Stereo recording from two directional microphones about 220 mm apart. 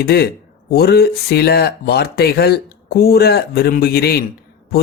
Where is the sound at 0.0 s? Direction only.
45° left (ahead or behind).